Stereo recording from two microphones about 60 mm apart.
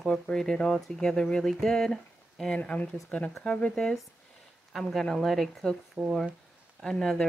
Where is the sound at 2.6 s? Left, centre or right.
Left.